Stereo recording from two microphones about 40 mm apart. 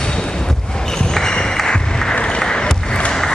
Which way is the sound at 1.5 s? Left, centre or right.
Centre.